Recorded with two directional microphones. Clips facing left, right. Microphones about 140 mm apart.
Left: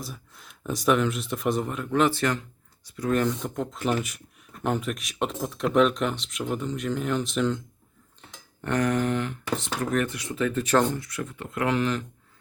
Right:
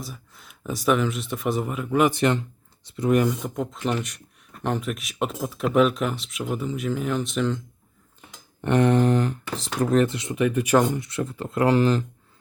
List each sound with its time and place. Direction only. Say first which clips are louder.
0.0 s speech: right 1 dB; centre (ahead or behind); by 3.2 s 25° right (ahead or behind)
3.2 s speech: right 3 dB; 5° right (ahead or behind)
8.3 s speech: right 5 dB; 20° right (ahead or behind)